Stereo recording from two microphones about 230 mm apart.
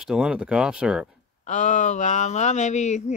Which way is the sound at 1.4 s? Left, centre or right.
Left.